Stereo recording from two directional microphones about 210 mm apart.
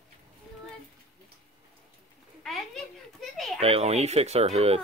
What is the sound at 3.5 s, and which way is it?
Speech, 30° right (ahead or behind).